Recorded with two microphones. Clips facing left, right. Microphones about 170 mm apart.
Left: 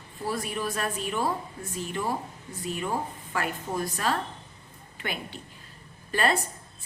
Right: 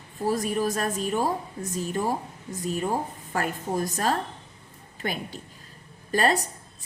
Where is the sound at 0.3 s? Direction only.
40° right (ahead or behind).